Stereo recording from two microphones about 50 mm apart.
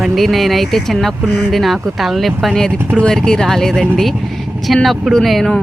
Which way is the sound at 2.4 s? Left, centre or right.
Centre.